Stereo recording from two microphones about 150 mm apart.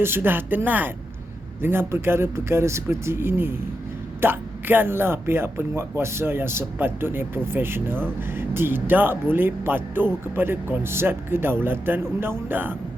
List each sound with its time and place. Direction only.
0.0 s speech: 15° right (ahead or behind)